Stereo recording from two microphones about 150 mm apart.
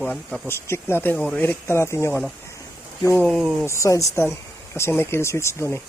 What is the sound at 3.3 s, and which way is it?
Speech, centre (ahead or behind).